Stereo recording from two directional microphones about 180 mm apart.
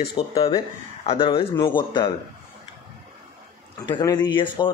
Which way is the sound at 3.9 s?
25° left (ahead or behind).